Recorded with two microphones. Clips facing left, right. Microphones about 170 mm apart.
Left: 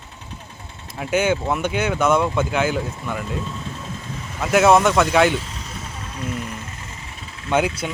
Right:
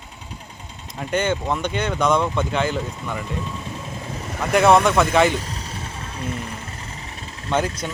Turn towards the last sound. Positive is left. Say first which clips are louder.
# left 2 dB
turn(degrees=10)  # may be behind; listen again after turning